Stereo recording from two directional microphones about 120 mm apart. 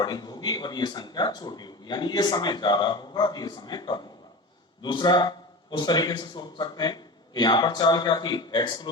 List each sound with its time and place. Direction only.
0.0 s speech: 35° left (ahead or behind)